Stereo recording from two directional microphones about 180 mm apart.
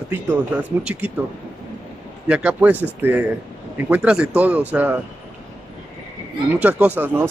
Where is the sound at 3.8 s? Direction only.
5° right (ahead or behind).